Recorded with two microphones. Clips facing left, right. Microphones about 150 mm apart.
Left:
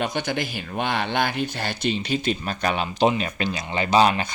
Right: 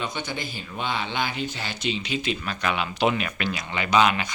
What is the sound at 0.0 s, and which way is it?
Speech, 75° left (ahead or behind).